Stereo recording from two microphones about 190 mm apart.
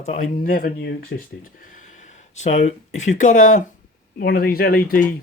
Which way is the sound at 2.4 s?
40° left (ahead or behind).